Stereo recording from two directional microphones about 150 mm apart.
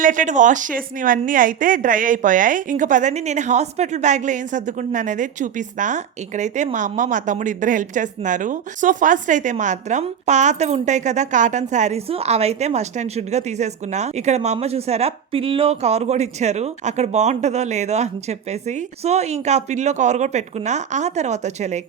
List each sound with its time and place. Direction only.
0.0 s a woman's voice: 60° right (ahead or behind)